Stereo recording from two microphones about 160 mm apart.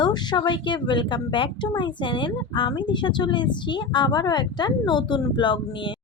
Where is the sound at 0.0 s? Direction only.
25° left (ahead or behind).